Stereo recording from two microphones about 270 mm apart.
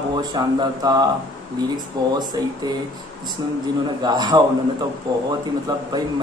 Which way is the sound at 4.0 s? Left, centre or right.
Centre.